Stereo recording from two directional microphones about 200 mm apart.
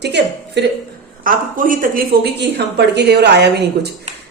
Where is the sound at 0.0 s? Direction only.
55° right (ahead or behind).